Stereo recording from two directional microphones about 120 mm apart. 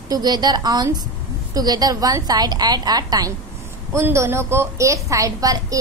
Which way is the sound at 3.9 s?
20° right (ahead or behind).